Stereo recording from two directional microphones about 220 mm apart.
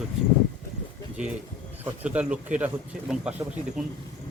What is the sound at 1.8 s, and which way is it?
Speech, 5° right (ahead or behind).